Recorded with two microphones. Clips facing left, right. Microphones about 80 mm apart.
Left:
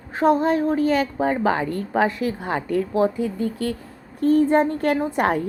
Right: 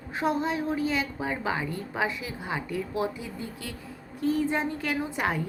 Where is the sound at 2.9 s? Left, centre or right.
Left.